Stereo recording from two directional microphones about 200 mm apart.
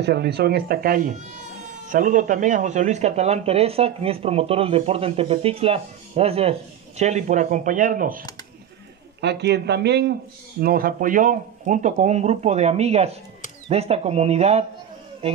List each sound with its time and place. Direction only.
0.0 s speech: 55° right (ahead or behind)
9.2 s speech: 55° right (ahead or behind); by 14.6 s 30° right (ahead or behind)